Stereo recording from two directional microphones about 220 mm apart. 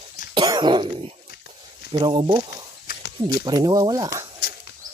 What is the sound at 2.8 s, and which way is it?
Snake, 45° left (ahead or behind).